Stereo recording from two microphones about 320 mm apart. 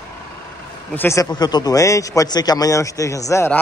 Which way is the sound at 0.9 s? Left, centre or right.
Centre.